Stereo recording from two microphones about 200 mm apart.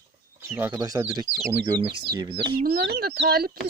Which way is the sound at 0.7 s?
20° right (ahead or behind).